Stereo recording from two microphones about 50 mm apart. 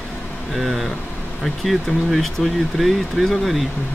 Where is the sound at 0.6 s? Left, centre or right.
Centre.